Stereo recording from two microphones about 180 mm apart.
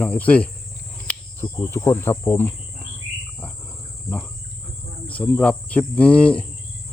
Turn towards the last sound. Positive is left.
turn(degrees=5)  # may be behind; listen again after turning